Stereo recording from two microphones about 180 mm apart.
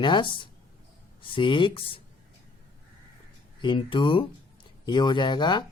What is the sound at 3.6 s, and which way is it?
Speech, 25° left (ahead or behind).